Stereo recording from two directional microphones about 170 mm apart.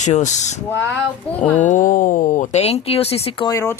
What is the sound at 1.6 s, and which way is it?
Speech, 50° left (ahead or behind).